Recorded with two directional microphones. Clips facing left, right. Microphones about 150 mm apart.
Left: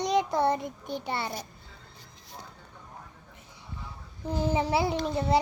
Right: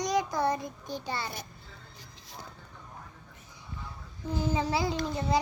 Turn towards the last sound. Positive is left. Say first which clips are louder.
# left 3 dB
turn(degrees=25)  # may be behind; listen again after turning